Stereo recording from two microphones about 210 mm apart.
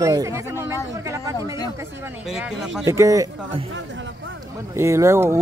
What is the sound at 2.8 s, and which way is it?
Speech, 15° right (ahead or behind).